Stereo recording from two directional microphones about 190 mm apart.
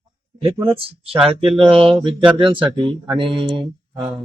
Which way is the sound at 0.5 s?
10° right (ahead or behind).